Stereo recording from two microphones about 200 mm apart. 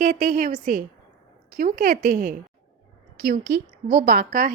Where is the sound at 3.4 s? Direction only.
65° right (ahead or behind).